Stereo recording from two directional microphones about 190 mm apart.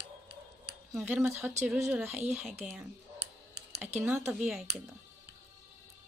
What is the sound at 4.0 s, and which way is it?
Speech, 10° right (ahead or behind).